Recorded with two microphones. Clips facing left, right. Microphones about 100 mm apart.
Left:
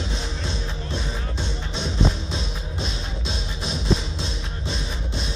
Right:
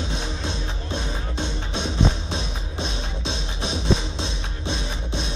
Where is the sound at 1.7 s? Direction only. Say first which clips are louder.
Right 1 dB; 20° right (ahead or behind).